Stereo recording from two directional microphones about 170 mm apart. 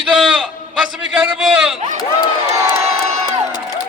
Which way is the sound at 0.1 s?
5° right (ahead or behind).